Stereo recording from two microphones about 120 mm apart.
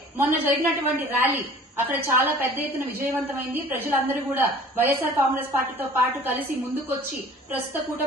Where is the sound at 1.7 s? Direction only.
15° right (ahead or behind).